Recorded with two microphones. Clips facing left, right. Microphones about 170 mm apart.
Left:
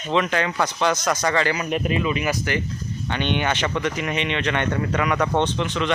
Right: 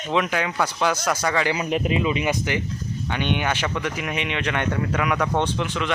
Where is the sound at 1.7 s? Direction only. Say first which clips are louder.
Even; 20° right (ahead or behind).